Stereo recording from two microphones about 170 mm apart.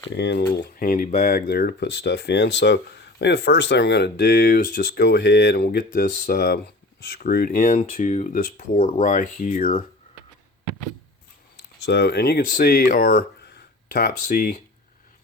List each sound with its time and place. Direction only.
0.1 s speech: 80° left; by 9.8 s 55° left (ahead or behind)
11.8 s speech: 80° left
13.9 s speech: 55° left (ahead or behind)